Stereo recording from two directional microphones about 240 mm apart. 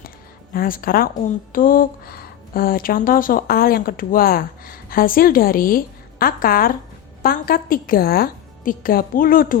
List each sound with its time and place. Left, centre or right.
0.5 s speech: left